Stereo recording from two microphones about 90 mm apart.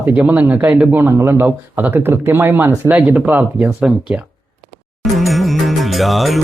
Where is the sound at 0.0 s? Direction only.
20° right (ahead or behind).